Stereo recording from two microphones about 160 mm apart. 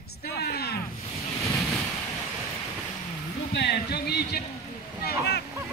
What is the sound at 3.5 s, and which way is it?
Speech, 90° left.